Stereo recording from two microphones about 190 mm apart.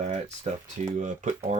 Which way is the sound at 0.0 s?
40° right (ahead or behind).